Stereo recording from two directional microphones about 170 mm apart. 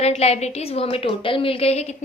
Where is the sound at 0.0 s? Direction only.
35° left (ahead or behind).